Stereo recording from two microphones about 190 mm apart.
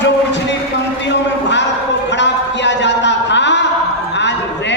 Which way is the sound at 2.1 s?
70° left (ahead or behind).